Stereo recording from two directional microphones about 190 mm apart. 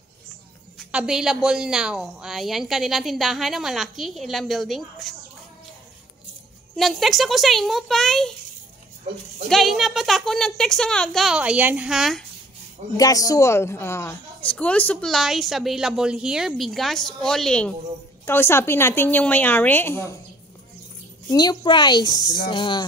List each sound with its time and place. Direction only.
0.7 s a woman's voice: 5° right (ahead or behind)
6.8 s a woman's voice: centre (ahead or behind)
9.5 s a woman's voice: centre (ahead or behind)
12.9 s a woman's voice: 20° left (ahead or behind)
21.3 s a woman's voice: 20° left (ahead or behind)